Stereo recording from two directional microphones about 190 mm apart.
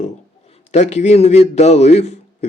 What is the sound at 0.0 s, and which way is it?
A man's voice, 35° left (ahead or behind).